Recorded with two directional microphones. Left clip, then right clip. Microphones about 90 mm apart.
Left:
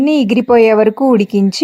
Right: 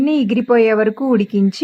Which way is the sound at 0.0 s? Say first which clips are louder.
Left 4 dB; 25° left (ahead or behind).